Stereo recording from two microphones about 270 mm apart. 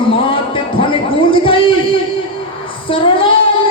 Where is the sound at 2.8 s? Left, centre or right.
Centre.